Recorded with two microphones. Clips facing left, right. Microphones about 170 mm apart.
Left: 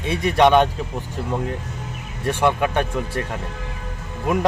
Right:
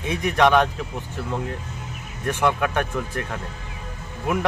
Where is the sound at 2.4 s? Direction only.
25° left (ahead or behind).